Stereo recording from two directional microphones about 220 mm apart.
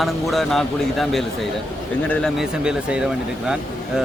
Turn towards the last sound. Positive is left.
turn(degrees=-5)  # may be behind; listen again after turning